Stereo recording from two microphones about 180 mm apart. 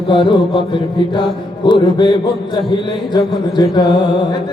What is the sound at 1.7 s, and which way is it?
Speech, 25° left (ahead or behind).